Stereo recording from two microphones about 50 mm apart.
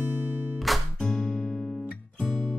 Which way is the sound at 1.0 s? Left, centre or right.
Centre.